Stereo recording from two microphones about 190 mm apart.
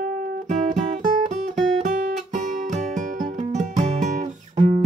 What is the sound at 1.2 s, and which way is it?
Guitar, 40° right (ahead or behind).